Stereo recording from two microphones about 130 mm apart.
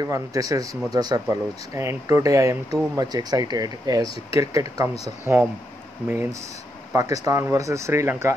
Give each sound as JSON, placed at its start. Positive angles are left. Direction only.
{"t": 0.0, "sound": "speech", "side_deg": -25}
{"t": 6.9, "sound": "speech", "side_deg": -25}